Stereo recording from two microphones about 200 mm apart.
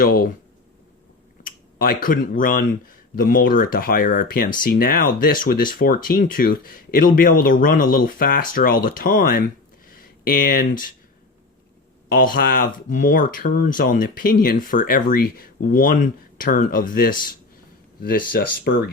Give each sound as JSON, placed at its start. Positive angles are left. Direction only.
{"t": 0.0, "sound": "speech", "side_deg": 45}
{"t": 1.5, "sound": "speech", "side_deg": 45}
{"t": 12.0, "sound": "speech", "side_deg": 45}